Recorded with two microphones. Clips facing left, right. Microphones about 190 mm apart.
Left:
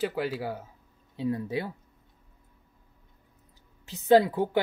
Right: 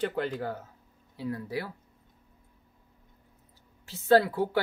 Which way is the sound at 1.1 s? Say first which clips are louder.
Left 4 dB; 20° left (ahead or behind).